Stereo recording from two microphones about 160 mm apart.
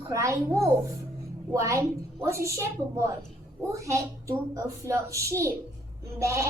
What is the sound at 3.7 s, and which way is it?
A child's voice, 20° right (ahead or behind).